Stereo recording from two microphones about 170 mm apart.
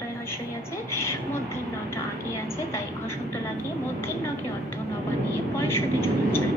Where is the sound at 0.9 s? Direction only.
15° left (ahead or behind).